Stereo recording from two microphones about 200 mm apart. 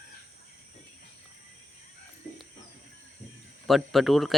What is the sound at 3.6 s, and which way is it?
Speech, centre (ahead or behind).